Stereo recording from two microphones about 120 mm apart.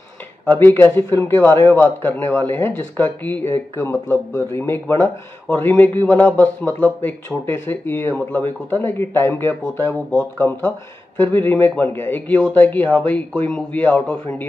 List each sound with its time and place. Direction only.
0.5 s a man's voice: 20° left (ahead or behind)